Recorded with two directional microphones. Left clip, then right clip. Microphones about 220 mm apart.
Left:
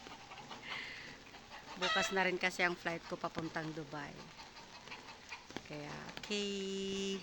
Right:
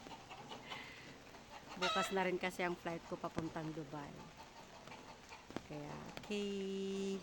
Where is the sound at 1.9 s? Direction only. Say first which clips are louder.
Left 5 dB; centre (ahead or behind).